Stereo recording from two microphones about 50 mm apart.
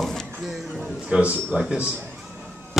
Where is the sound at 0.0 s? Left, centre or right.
Centre.